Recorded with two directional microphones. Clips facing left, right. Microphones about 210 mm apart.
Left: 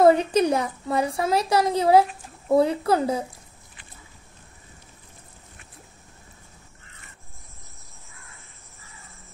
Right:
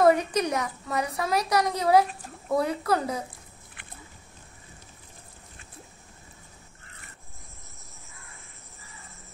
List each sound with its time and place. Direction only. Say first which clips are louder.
0.0 s a woman's voice: left 4 dB; 30° left (ahead or behind)